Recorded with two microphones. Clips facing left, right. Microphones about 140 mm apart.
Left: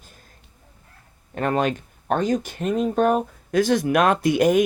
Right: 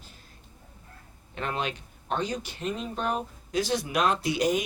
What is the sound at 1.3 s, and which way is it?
Speech, 50° left (ahead or behind).